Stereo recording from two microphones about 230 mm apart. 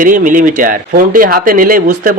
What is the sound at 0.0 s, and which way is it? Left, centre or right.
Speech, right.